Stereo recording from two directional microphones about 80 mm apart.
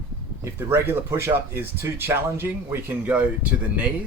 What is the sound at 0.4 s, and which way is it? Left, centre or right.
Speech, right.